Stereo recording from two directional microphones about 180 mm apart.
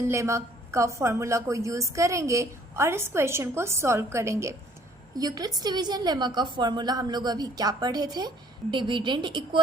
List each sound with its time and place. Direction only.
0.0 s a woman's voice: 15° right (ahead or behind)